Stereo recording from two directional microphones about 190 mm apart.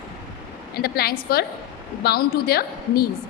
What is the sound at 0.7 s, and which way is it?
A woman's voice, 55° left (ahead or behind).